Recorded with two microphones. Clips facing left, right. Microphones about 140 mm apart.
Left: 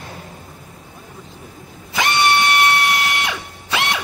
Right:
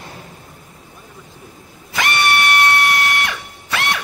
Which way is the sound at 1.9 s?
20° left (ahead or behind).